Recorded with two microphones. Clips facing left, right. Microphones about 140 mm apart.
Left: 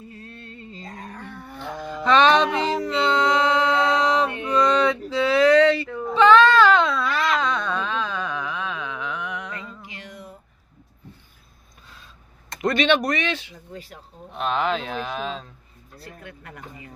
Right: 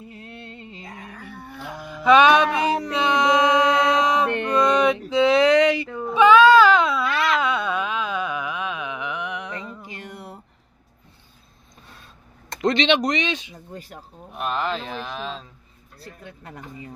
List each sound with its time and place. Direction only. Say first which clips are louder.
0.0 s music: right 1 dB; 20° right (ahead or behind)
1.6 s mantra: left 2 dB; 10° right (ahead or behind)
4.3 s a sound: right 4 dB; 70° right (ahead or behind)
4.6 s a sound: right 1 dB; 15° right (ahead or behind)
9.8 s a sound: right 3 dB; 50° right (ahead or behind)
12.6 s speech: even; 20° right (ahead or behind)
13.7 s speech: right 1 dB; 50° right (ahead or behind)
14.3 s speech: left 2 dB; 5° right (ahead or behind)
16.0 s speech: even; 25° right (ahead or behind)